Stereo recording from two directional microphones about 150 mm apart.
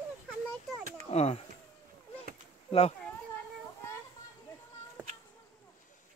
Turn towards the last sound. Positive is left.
turn(degrees=-10)  # may be behind; listen again after turning